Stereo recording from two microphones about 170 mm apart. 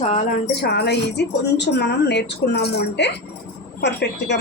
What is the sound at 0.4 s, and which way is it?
A woman's voice, 70° left (ahead or behind).